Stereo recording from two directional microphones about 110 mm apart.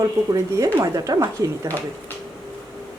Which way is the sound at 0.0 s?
30° right (ahead or behind).